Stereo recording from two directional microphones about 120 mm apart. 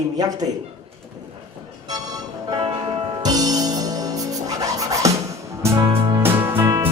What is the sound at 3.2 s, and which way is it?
Music, 30° right (ahead or behind).